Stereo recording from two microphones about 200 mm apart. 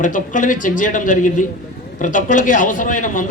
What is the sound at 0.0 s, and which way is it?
A man's voice, 40° left (ahead or behind).